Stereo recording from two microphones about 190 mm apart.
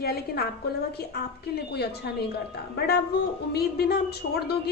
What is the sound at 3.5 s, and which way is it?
A woman's voice, 55° left (ahead or behind).